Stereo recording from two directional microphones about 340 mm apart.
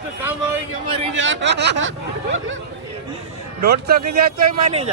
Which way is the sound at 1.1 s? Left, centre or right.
Right.